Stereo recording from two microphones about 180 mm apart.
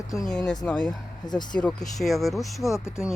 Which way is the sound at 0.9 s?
25° left (ahead or behind).